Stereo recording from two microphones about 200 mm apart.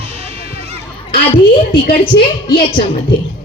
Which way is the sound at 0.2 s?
30° right (ahead or behind).